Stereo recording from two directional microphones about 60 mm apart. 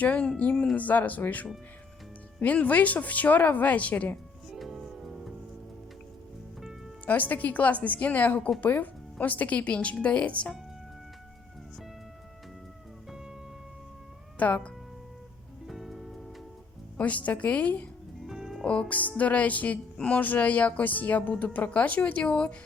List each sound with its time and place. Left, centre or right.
0.0 s speech: centre
0.5 s speech: centre
0.8 s speech: left
4.5 s music: centre
7.0 s speech: left
14.3 s speech: left
15.6 s music: centre
17.0 s speech: left
18.2 s music: centre
18.6 s speech: centre